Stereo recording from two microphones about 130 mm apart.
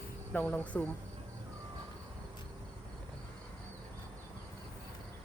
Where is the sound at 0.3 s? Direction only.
10° left (ahead or behind).